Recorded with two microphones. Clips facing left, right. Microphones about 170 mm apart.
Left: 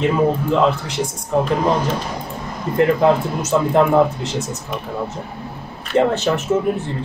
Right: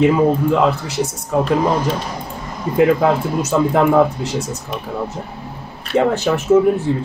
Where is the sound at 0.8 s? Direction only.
5° right (ahead or behind).